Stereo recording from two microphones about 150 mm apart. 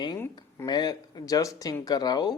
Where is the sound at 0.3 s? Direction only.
25° left (ahead or behind).